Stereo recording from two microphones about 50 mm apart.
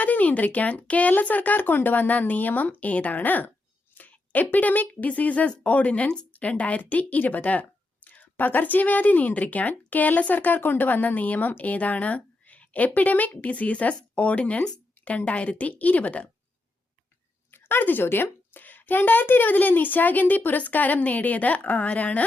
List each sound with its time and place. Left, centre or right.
0.0 s speech: left
17.5 s speech: left